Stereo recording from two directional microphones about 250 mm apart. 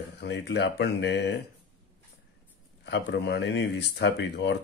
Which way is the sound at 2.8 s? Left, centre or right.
Left.